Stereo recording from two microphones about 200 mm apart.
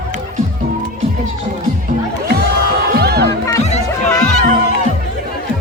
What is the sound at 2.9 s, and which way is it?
Music, 55° right (ahead or behind).